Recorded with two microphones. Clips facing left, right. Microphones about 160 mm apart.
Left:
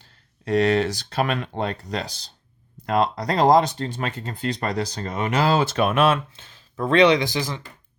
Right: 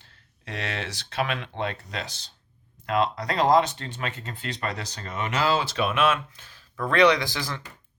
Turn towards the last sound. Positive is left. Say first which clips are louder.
# left 3 dB
turn(degrees=20)  # may be behind; listen again after turning